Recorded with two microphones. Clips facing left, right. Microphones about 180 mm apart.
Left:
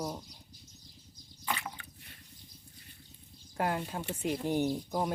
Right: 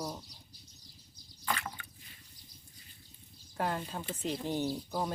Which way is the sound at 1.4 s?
15° left (ahead or behind).